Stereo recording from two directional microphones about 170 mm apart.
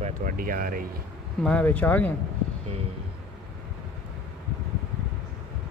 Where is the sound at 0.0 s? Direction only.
50° right (ahead or behind).